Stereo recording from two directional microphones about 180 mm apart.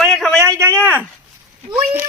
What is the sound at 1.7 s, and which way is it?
Speech, 15° right (ahead or behind).